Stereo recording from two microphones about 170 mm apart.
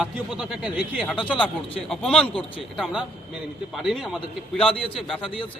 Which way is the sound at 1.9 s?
5° left (ahead or behind).